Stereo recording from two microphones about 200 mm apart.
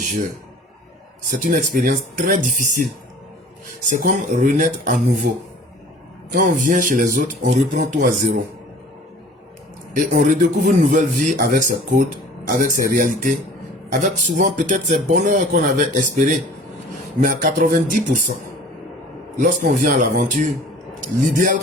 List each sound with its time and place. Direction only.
1.3 s speech: 40° right (ahead or behind)
3.8 s speech: 40° right (ahead or behind)
6.3 s speech: 40° right (ahead or behind)
9.9 s speech: 40° right (ahead or behind)
19.4 s speech: 40° right (ahead or behind)